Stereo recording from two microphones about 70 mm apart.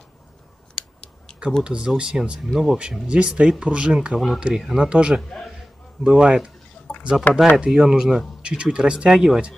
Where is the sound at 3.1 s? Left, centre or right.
Centre.